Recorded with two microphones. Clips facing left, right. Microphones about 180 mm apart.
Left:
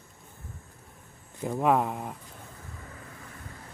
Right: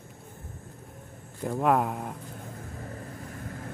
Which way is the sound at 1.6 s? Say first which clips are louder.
Even; centre (ahead or behind).